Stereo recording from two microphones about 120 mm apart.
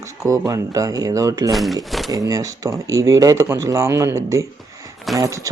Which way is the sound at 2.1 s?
30° right (ahead or behind).